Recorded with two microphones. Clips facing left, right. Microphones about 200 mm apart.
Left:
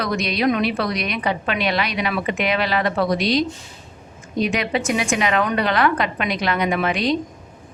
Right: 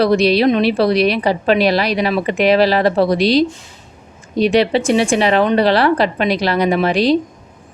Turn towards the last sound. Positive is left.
turn(degrees=-35)  # may be behind; listen again after turning